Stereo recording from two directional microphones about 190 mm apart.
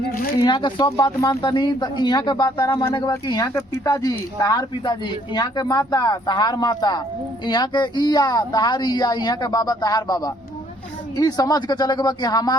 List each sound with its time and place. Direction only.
0.3 s speech: 25° left (ahead or behind)